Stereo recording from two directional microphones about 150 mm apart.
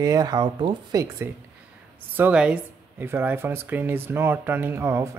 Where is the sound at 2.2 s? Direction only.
10° right (ahead or behind).